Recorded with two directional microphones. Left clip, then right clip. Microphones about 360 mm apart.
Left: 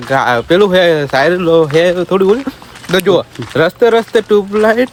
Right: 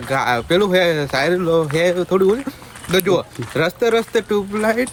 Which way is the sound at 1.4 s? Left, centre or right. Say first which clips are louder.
Left 7 dB; left.